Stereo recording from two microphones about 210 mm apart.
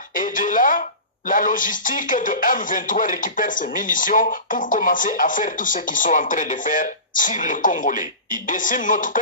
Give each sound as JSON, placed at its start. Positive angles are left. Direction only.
{"t": 0.1, "sound": "speech", "side_deg": 40}